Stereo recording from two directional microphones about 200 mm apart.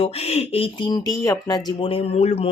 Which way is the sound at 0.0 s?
30° left (ahead or behind).